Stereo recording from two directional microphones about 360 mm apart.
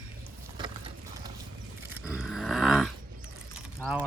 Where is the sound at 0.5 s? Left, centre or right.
Centre.